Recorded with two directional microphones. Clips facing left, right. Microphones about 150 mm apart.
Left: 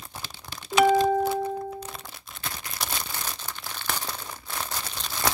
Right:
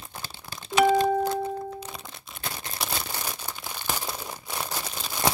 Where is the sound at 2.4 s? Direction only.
30° right (ahead or behind).